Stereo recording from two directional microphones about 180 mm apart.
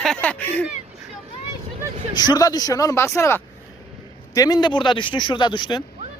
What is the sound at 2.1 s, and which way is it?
Speech, 25° left (ahead or behind).